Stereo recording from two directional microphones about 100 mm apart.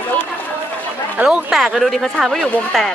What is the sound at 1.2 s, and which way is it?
Speech, 5° right (ahead or behind).